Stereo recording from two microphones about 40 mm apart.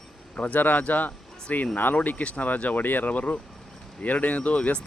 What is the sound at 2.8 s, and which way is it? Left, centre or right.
Speech, left.